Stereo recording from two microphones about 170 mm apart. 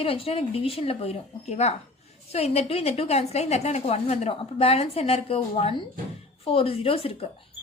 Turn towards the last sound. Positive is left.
turn(degrees=35)  # may be behind; listen again after turning